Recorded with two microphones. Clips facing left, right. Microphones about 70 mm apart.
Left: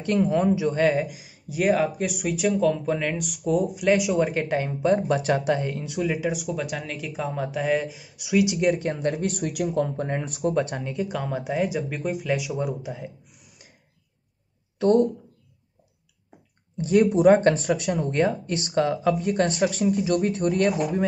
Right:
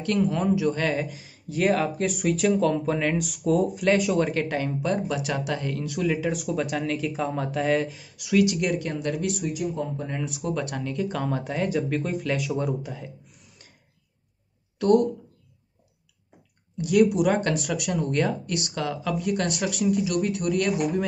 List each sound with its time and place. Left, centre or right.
0.0 s speech: left; by 4.3 s centre
4.3 s speech: left
8.6 s speech: left
9.4 s speech: left
10.4 s speech: left
14.8 s speech: left
16.7 s speech: left